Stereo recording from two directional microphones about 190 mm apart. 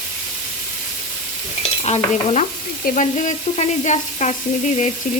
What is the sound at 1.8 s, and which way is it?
Frying, 35° left (ahead or behind).